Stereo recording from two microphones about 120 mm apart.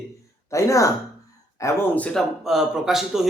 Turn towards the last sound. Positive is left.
turn(degrees=-5)  # may be behind; listen again after turning